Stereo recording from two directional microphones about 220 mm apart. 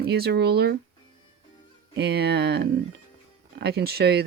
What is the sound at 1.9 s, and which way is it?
Speech, 50° right (ahead or behind).